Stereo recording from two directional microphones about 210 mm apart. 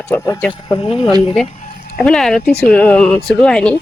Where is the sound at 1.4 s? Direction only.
30° left (ahead or behind).